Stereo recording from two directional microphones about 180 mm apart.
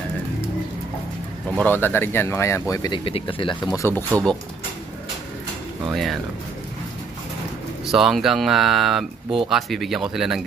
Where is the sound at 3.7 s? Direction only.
15° left (ahead or behind).